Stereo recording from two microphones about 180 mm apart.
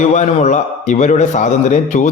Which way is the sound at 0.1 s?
40° left (ahead or behind).